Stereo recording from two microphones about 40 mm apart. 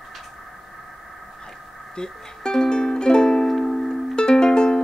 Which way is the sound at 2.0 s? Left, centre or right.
Centre.